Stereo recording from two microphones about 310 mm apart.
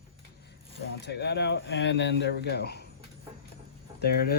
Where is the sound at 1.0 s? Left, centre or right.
Left.